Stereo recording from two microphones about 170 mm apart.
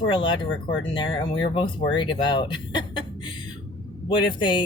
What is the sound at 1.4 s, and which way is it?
Speech, 30° left (ahead or behind).